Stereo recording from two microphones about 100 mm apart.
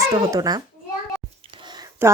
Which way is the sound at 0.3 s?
40° right (ahead or behind).